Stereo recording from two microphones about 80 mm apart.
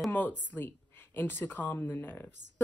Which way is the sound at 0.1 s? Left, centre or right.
Left.